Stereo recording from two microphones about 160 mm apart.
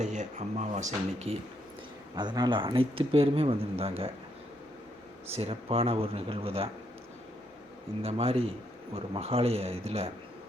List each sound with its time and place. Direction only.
0.0 s speech: 45° right (ahead or behind)
2.1 s speech: 25° right (ahead or behind)
5.3 s speech: 40° right (ahead or behind)
8.0 s speech: 35° right (ahead or behind)